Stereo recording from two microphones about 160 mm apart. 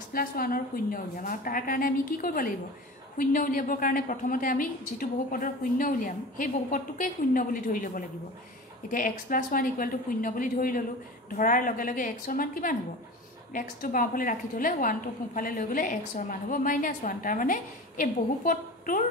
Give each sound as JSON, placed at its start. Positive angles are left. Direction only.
{"t": 0.1, "sound": "a woman's voice", "side_deg": 65}